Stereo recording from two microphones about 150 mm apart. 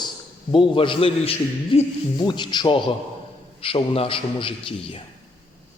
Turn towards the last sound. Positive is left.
turn(degrees=35)  # may be behind; listen again after turning